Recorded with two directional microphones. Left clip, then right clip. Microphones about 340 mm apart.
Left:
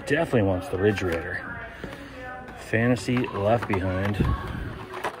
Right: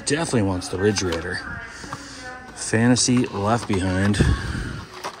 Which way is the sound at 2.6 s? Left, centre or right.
Right.